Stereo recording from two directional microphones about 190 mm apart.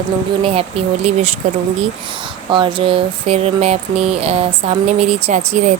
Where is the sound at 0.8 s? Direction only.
30° right (ahead or behind).